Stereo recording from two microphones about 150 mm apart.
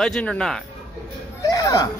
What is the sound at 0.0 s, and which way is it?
Speech, 5° left (ahead or behind).